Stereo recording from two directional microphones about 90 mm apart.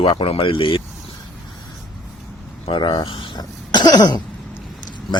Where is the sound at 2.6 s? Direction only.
60° left (ahead or behind).